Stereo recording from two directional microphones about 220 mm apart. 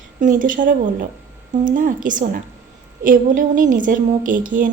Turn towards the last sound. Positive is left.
turn(degrees=-35)  # may be behind; listen again after turning